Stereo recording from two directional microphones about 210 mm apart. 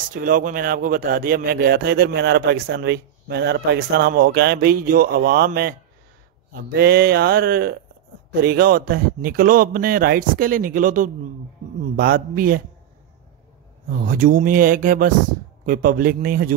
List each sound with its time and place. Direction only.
0.1 s speech: 40° right (ahead or behind)
13.8 s speech: 40° right (ahead or behind)